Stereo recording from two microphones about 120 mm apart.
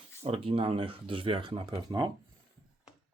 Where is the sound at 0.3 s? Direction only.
50° right (ahead or behind).